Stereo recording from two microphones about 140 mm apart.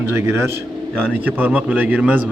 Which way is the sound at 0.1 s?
20° right (ahead or behind).